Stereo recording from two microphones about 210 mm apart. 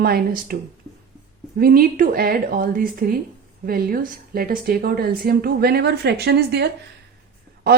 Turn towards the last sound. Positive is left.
turn(degrees=-45)  # may be behind; listen again after turning